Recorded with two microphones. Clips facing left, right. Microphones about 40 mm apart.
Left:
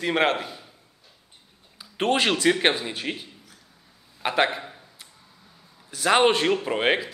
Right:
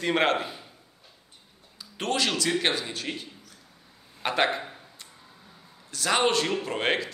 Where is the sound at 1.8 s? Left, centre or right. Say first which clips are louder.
Left 5 dB; left; by 4.7 s centre.